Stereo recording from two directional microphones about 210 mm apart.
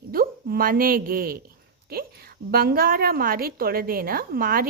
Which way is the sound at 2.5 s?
45° right (ahead or behind).